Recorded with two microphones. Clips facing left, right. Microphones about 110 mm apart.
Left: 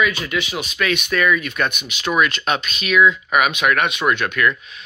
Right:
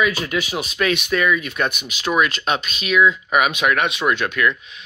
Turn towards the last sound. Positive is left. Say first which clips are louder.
# left 1 dB
turn(degrees=-20)  # may be behind; listen again after turning